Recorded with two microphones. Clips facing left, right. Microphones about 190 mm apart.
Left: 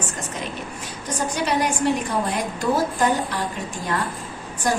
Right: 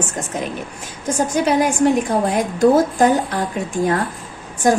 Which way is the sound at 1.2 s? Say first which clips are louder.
Right 6 dB; 50° right (ahead or behind).